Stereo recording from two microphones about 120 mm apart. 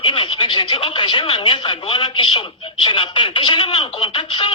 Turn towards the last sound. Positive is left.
turn(degrees=45)  # may be behind; listen again after turning